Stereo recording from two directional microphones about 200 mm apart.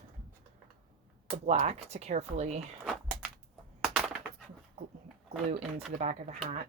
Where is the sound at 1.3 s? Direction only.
35° right (ahead or behind).